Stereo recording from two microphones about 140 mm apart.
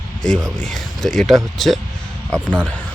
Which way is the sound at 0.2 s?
5° left (ahead or behind).